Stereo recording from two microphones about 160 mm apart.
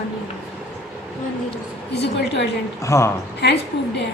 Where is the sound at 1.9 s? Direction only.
90° left.